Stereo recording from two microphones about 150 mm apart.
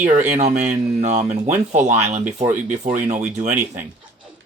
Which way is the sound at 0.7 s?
50° right (ahead or behind).